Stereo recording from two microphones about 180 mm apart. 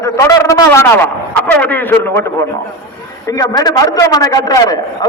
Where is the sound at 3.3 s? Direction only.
20° left (ahead or behind).